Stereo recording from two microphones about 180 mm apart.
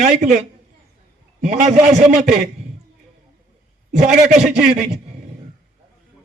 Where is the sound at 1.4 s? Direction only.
40° right (ahead or behind).